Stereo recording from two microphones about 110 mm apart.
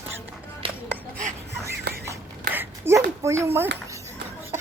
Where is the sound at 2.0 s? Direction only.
20° right (ahead or behind).